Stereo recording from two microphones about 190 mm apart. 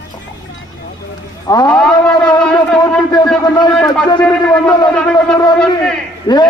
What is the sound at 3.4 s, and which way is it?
Speech, 25° left (ahead or behind).